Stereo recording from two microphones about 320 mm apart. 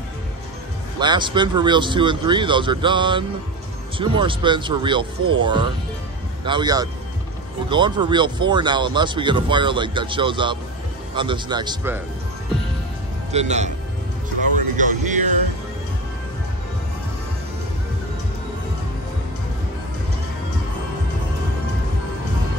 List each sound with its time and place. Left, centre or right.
0.9 s speech: centre
13.3 s music: right
14.8 s music: right